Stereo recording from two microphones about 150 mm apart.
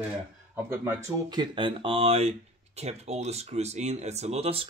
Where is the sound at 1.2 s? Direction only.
30° right (ahead or behind).